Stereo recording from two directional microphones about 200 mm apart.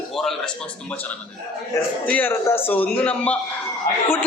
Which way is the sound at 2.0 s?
10° left (ahead or behind).